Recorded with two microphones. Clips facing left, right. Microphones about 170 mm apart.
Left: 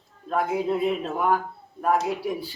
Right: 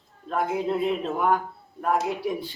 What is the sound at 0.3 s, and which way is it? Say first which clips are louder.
Speech: left 1 dB; centre (ahead or behind).